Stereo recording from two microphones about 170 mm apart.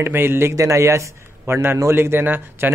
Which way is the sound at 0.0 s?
15° right (ahead or behind).